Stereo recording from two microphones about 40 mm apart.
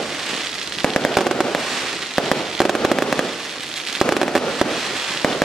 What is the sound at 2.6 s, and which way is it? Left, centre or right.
Fireworks, centre.